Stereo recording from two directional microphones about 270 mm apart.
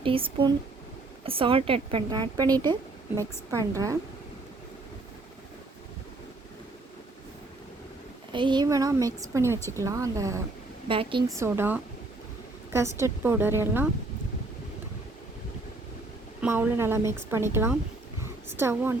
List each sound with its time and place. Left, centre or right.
0.0 s a woman's voice: centre
8.3 s a woman's voice: centre
11.3 s speech: centre
16.4 s speech: centre